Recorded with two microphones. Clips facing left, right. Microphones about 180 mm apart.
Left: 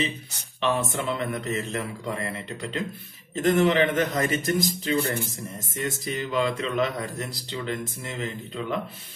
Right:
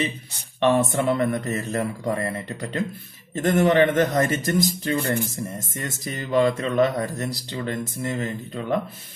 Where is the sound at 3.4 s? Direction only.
45° right (ahead or behind).